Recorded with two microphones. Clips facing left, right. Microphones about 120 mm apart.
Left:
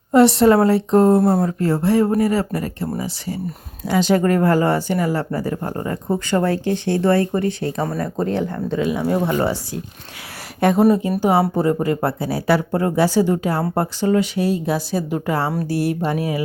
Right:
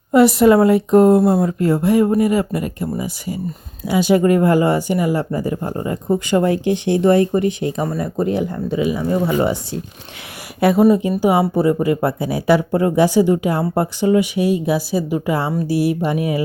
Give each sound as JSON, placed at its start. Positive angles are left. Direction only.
{"t": 0.1, "sound": "speech", "side_deg": -10}
{"t": 10.6, "sound": "speech", "side_deg": -5}